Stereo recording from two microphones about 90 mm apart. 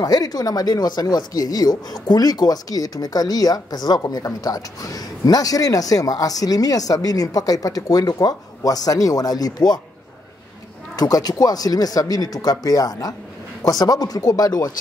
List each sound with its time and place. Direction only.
0.0 s speech: 45° left (ahead or behind)
11.0 s speech: 45° left (ahead or behind)